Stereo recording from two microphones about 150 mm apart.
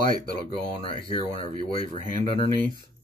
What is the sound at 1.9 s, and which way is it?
Speech, 60° right (ahead or behind).